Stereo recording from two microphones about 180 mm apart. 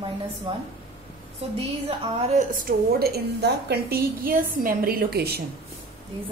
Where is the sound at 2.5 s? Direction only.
55° right (ahead or behind).